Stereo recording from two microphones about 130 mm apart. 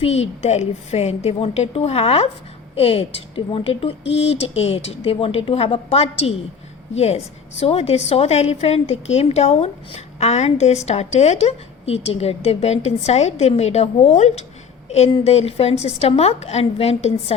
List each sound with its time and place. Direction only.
0.0 s a woman's voice: 55° left (ahead or behind)
7.6 s a woman's voice: 50° left (ahead or behind)